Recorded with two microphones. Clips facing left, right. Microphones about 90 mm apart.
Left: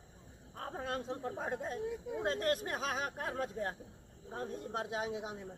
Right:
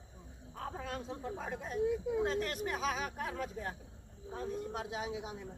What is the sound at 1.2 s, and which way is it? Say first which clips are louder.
Speech: left 2 dB; 40° left (ahead or behind).